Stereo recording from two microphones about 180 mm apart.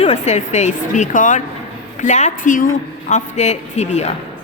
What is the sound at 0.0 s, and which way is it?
A woman's voice, 40° left (ahead or behind).